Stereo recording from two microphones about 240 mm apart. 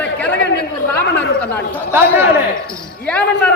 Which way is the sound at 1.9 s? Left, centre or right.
Centre.